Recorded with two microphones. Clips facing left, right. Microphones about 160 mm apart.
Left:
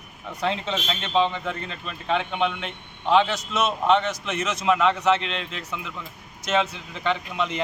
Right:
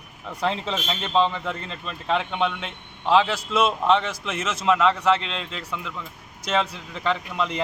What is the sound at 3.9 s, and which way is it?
A man's voice, centre (ahead or behind).